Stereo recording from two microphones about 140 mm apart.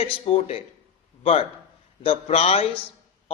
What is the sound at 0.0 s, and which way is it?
A man's voice, 40° left (ahead or behind).